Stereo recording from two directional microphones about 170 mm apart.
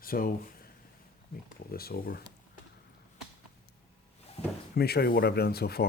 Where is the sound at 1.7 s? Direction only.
65° left (ahead or behind).